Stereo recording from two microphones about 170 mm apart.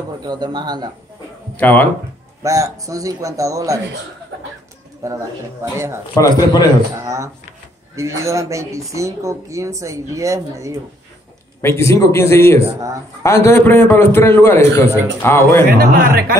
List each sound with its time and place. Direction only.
0.2 s a man's voice: 25° right (ahead or behind)
1.6 s a man's voice: 10° left (ahead or behind)
2.4 s a man's voice: 20° right (ahead or behind)
5.0 s a man's voice: 20° right (ahead or behind)
6.2 s a man's voice: 20° left (ahead or behind)
7.0 s speech: 15° right (ahead or behind)
11.6 s a man's voice: 15° left (ahead or behind)
15.7 s speech: 65° right (ahead or behind)